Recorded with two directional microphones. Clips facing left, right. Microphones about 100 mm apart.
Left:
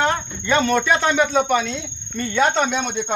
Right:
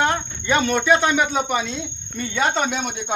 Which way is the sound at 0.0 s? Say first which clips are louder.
Even; 10° right (ahead or behind).